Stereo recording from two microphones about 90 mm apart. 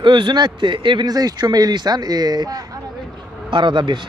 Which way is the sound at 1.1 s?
45° right (ahead or behind).